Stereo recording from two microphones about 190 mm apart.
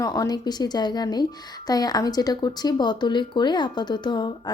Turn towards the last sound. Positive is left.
turn(degrees=25)  # may be behind; listen again after turning